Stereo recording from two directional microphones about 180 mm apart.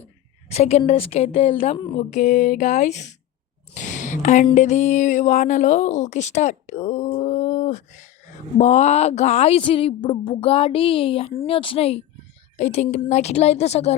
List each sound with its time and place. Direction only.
0.4 s speech: 35° left (ahead or behind)
2.0 s speech: 45° left (ahead or behind)
3.8 s a sound: 45° left (ahead or behind)
4.5 s speech: 40° left (ahead or behind)